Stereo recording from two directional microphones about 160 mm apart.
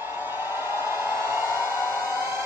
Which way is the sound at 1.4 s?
20° left (ahead or behind).